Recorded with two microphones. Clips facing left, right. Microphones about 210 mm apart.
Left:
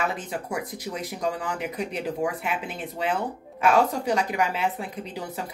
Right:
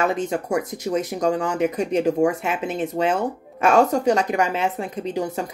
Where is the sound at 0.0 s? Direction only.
45° right (ahead or behind).